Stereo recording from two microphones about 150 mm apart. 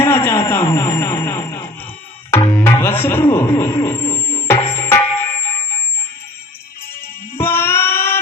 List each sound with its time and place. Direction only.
0.0 s speech: 15° left (ahead or behind)
2.5 s music: 15° left (ahead or behind)
7.3 s child singing: 15° left (ahead or behind)